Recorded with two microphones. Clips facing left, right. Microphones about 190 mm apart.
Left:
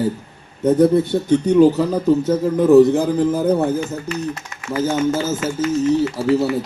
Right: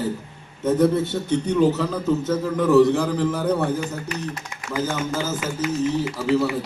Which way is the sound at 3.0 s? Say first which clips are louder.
Left 5 dB; 25° left (ahead or behind).